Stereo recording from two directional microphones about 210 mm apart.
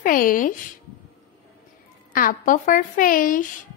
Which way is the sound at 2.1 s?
40° left (ahead or behind).